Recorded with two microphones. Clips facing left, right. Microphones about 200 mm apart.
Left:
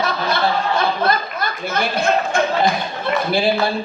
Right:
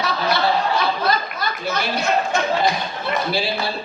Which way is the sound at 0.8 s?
50° left (ahead or behind).